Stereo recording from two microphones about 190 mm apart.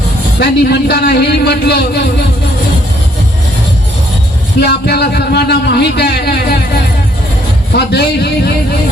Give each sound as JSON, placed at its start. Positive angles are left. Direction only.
{"t": 0.3, "sound": "a man's voice", "side_deg": 60}
{"t": 4.6, "sound": "a man's voice", "side_deg": 60}
{"t": 7.7, "sound": "a man's voice", "side_deg": 60}